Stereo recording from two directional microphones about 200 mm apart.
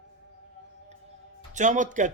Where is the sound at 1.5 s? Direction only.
40° right (ahead or behind).